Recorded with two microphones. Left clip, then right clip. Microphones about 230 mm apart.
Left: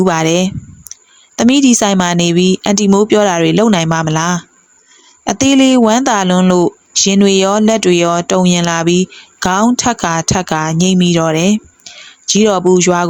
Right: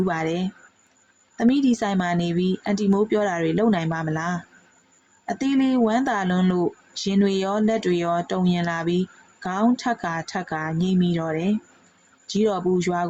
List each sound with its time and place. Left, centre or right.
0.0 s speech: left